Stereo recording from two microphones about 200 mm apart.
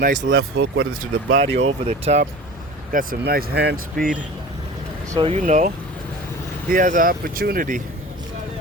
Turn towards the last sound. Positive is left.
turn(degrees=-40)  # may be behind; listen again after turning